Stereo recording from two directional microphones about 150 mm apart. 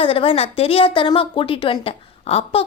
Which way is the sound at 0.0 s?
35° left (ahead or behind).